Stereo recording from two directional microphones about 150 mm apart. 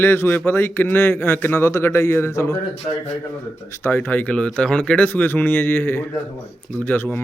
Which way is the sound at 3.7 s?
15° left (ahead or behind).